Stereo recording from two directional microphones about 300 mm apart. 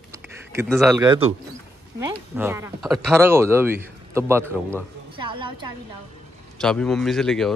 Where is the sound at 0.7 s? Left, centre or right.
Centre.